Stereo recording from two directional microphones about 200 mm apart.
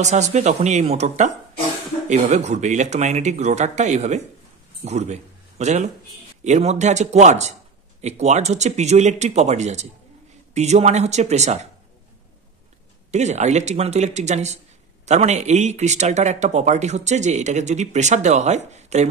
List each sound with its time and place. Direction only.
0.0 s speech: 35° right (ahead or behind)
13.1 s speech: 35° right (ahead or behind)